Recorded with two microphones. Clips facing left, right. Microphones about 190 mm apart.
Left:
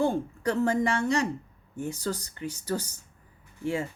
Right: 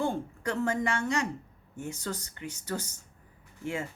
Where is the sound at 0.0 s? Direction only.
35° left (ahead or behind).